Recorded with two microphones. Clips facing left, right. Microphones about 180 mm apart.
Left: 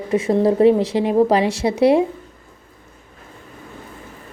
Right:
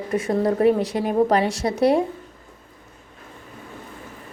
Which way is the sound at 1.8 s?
5° left (ahead or behind).